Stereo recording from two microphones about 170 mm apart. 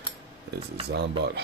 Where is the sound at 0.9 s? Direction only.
75° right (ahead or behind).